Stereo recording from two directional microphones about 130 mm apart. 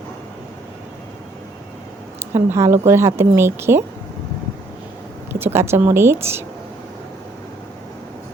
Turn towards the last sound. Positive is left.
turn(degrees=-20)  # may be behind; listen again after turning